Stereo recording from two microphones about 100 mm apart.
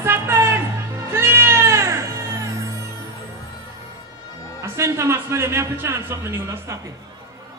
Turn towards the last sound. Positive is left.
turn(degrees=-25)  # may be behind; listen again after turning